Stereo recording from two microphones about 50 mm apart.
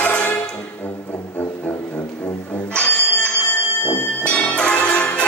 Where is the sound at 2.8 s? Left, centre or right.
Left.